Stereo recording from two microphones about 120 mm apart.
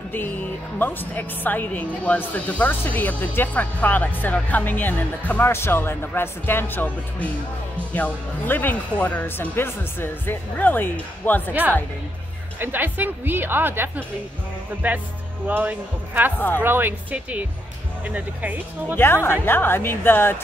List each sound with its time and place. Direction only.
0.1 s a woman's voice: 15° left (ahead or behind)
12.5 s a woman's voice: 15° right (ahead or behind)
16.3 s a woman's voice: 15° left (ahead or behind)
16.6 s a woman's voice: 15° right (ahead or behind)
18.9 s a woman's voice: 20° left (ahead or behind)